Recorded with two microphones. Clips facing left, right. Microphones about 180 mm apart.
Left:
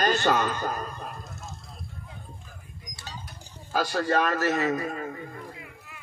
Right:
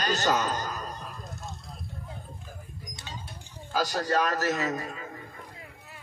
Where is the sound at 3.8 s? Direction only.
40° right (ahead or behind).